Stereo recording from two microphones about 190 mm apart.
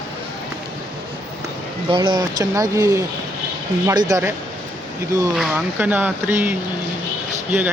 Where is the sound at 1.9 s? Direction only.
25° right (ahead or behind).